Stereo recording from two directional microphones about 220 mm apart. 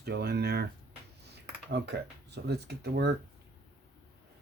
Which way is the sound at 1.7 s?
50° right (ahead or behind).